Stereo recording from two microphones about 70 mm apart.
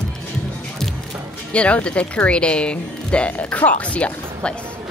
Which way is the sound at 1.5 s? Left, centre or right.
Centre.